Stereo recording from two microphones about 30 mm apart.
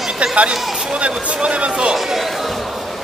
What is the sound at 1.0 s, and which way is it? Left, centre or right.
Speech, right.